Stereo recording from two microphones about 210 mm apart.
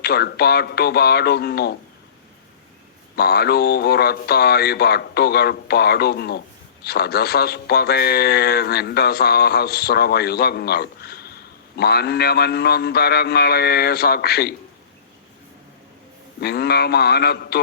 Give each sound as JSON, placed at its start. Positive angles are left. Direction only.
{"t": 0.0, "sound": "a man's voice", "side_deg": 50}
{"t": 3.2, "sound": "a man's voice", "side_deg": 50}
{"t": 16.4, "sound": "a man's voice", "side_deg": 50}